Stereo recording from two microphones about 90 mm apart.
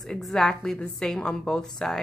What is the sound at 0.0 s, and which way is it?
A woman's voice, 5° left (ahead or behind).